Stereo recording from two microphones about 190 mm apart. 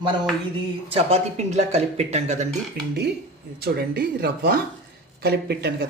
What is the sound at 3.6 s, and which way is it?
A woman's voice, 55° right (ahead or behind).